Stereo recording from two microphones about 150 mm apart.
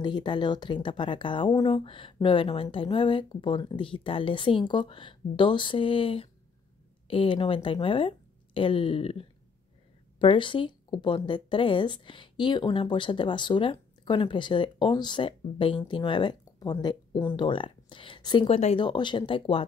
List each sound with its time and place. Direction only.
0.0 s speech: 30° left (ahead or behind)